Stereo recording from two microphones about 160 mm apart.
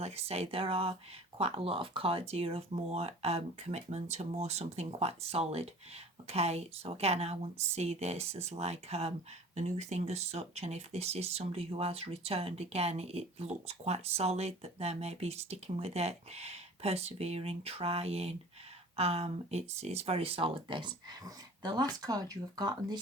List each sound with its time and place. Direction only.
0.0 s speech: 40° right (ahead or behind); by 23.0 s 25° right (ahead or behind)